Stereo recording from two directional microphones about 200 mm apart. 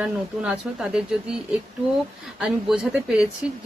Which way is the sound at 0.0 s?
5° right (ahead or behind).